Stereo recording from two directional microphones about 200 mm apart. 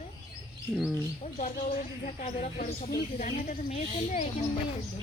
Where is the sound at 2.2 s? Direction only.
35° left (ahead or behind).